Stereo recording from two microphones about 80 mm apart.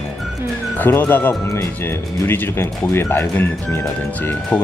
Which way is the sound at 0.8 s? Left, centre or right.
Left.